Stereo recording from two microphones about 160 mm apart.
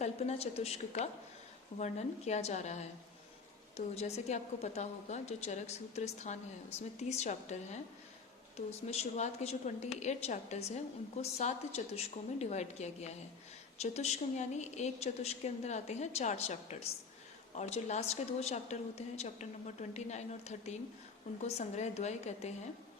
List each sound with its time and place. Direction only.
0.0 s a woman's voice: 40° left (ahead or behind)